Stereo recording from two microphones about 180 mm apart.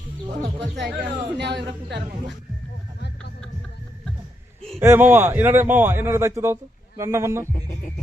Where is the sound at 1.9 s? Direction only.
75° right (ahead or behind).